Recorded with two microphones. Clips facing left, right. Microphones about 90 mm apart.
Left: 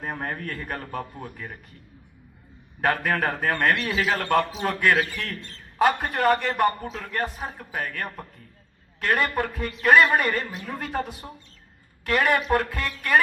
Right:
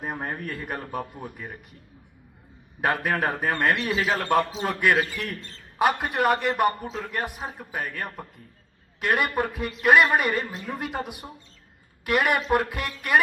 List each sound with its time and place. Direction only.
0.0 s a man's voice: 15° right (ahead or behind)
2.8 s a man's voice: 15° right (ahead or behind)